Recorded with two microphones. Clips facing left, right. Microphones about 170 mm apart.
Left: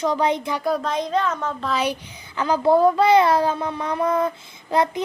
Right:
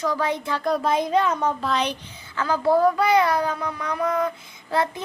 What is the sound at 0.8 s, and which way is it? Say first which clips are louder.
Speech: right 2 dB; 10° right (ahead or behind).